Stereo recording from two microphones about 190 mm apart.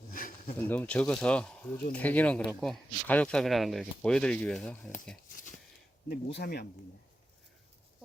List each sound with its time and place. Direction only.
0.1 s a sound: 45° left (ahead or behind)
0.5 s speech: 10° left (ahead or behind)
6.1 s speech: 55° left (ahead or behind)